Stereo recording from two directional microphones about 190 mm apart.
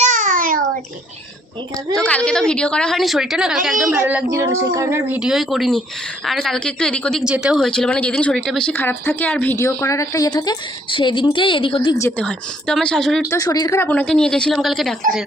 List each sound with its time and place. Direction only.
0.0 s a sound: 40° right (ahead or behind)
2.0 s a woman's voice: 5° left (ahead or behind); by 11.8 s 25° left (ahead or behind)
11.9 s a woman's voice: 15° left (ahead or behind)
13.3 s a woman's voice: 20° left (ahead or behind); by 14.9 s centre (ahead or behind)